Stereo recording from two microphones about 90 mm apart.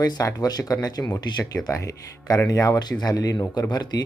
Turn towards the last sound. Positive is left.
turn(degrees=45)  # may be behind; listen again after turning